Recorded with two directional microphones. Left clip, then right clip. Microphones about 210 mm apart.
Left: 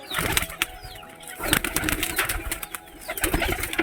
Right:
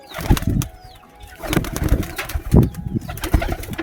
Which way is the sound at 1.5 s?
40° right (ahead or behind).